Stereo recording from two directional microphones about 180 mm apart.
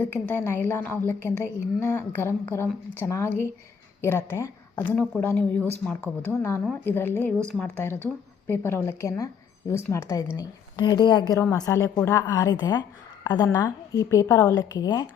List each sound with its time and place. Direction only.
0.0 s a woman's voice: 10° left (ahead or behind)